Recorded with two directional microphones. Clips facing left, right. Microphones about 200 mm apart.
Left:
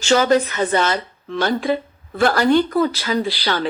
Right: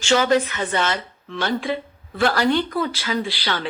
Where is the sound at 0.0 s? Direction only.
40° left (ahead or behind).